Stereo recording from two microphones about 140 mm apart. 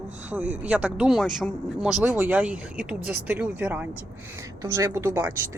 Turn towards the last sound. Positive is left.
turn(degrees=-15)  # may be behind; listen again after turning